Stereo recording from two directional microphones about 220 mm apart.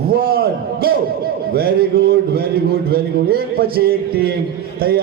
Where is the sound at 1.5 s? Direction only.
45° right (ahead or behind).